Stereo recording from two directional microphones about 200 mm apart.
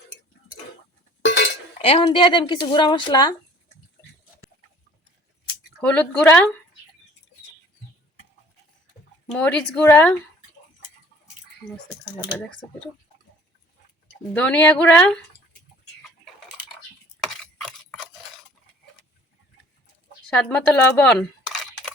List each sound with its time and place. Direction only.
1.2 s chink: 65° left (ahead or behind)
1.8 s speech: 30° left (ahead or behind)
5.8 s speech: 5° left (ahead or behind)
9.2 s speech: 5° left (ahead or behind)
14.3 s speech: 5° left (ahead or behind)
17.2 s a sound: 5° left (ahead or behind)
20.2 s speech: 5° left (ahead or behind)